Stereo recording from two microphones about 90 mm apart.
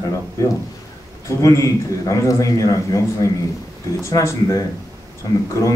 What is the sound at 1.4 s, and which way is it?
A man's voice, 35° left (ahead or behind).